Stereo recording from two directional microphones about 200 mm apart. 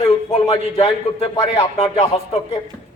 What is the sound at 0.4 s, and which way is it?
Speech, 25° left (ahead or behind).